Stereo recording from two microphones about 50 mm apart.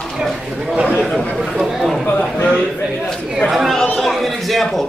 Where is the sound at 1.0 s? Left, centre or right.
Centre.